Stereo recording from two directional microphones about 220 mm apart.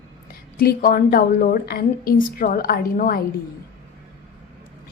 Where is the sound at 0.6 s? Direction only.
40° left (ahead or behind).